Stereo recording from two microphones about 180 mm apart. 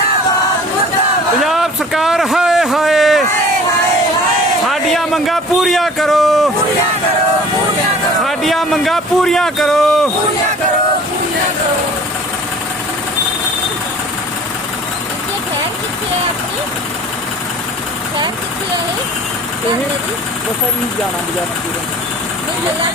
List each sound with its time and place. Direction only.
1.4 s a sound: centre (ahead or behind)
4.6 s a man's voice: centre (ahead or behind)
8.2 s a man's voice: centre (ahead or behind)